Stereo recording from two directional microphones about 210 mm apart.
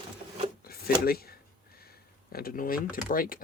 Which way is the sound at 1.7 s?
45° left (ahead or behind).